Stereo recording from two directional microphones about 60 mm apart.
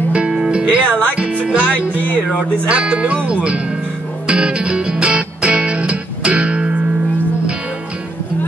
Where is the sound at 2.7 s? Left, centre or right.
Right.